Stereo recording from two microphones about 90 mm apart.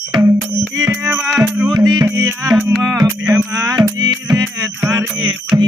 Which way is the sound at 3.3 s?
35° right (ahead or behind).